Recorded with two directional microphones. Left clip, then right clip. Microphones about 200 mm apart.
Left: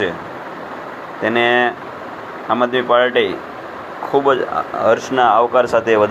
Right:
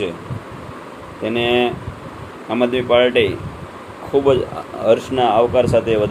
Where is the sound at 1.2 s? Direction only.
15° left (ahead or behind).